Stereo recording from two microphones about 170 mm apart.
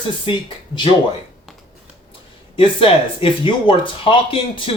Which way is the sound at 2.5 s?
30° left (ahead or behind).